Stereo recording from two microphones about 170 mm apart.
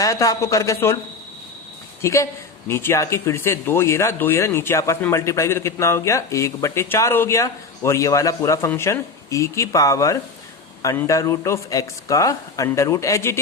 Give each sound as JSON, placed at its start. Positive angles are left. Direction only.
{"t": 0.0, "sound": "speech", "side_deg": 20}
{"t": 2.0, "sound": "speech", "side_deg": 15}